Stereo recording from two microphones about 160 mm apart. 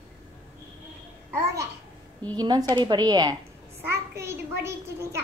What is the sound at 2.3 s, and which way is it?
A woman's voice, 25° right (ahead or behind).